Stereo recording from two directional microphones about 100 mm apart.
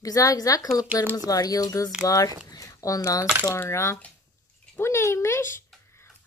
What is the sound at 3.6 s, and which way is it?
A child's voice, 30° left (ahead or behind).